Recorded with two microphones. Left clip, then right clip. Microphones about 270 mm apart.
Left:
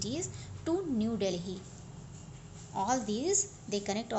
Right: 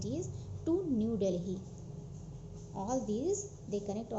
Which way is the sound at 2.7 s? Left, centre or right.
Centre.